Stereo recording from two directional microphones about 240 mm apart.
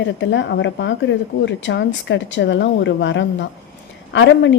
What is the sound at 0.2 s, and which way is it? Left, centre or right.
A woman's voice, left.